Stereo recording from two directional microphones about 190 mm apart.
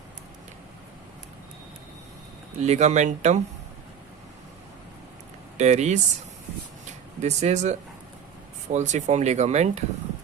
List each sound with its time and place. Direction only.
2.6 s speech: 35° right (ahead or behind)
5.5 s speech: 35° right (ahead or behind)
7.2 s speech: 35° right (ahead or behind)